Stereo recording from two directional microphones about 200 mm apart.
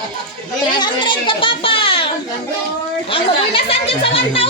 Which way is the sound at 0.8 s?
25° left (ahead or behind).